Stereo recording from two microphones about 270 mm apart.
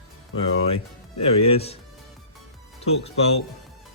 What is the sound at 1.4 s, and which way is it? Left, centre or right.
Speech, left.